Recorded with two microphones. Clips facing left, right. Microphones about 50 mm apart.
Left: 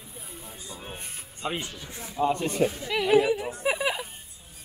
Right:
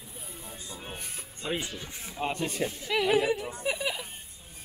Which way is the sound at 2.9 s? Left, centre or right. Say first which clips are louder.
Left 2 dB; centre.